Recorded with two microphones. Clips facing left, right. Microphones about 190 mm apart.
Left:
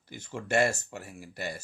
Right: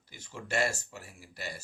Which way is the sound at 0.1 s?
55° left (ahead or behind).